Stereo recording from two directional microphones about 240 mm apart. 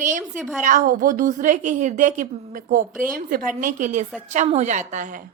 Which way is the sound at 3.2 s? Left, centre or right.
Right.